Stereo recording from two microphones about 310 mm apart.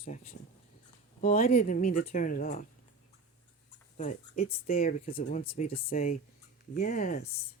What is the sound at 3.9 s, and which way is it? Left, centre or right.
Speech, left.